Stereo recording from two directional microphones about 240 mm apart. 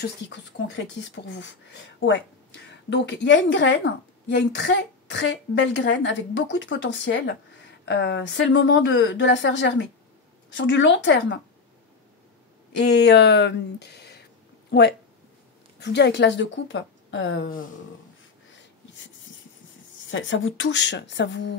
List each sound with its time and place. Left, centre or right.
0.0 s a woman's voice: left
12.7 s a woman's voice: left
20.1 s a woman's voice: left